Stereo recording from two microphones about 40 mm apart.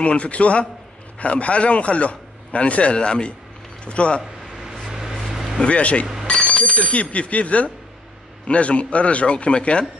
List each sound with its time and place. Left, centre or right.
0.0 s a man's voice: left
4.8 s vehicle: centre
5.6 s a man's voice: left